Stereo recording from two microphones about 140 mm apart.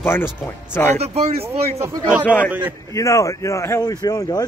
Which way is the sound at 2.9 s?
20° left (ahead or behind).